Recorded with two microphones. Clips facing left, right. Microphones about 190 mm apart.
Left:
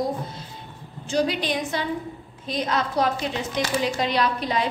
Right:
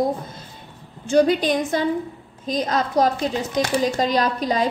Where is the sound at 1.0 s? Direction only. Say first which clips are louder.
Right 7 dB; 50° right (ahead or behind).